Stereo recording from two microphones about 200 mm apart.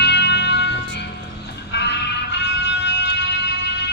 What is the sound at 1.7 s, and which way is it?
Music, 60° left (ahead or behind).